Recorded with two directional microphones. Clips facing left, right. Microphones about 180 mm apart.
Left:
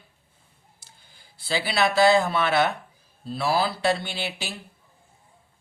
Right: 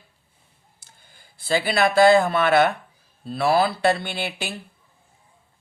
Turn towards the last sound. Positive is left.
turn(degrees=-55)  # may be behind; listen again after turning